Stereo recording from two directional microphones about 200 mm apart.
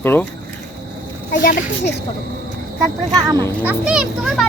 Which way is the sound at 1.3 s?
50° left (ahead or behind).